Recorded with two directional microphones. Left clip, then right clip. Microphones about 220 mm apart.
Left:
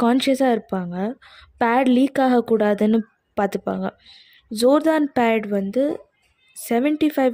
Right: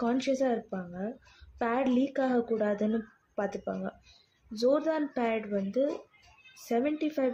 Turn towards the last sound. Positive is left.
turn(degrees=45)  # may be behind; listen again after turning